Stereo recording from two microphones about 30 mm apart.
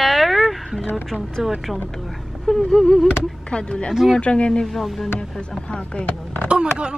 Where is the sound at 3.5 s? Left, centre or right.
Left.